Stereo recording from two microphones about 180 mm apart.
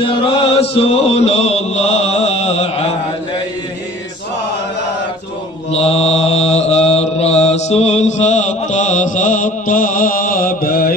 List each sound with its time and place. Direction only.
0.0 s chant: 30° left (ahead or behind)
5.7 s mantra: 35° left (ahead or behind); by 10.9 s 55° left (ahead or behind)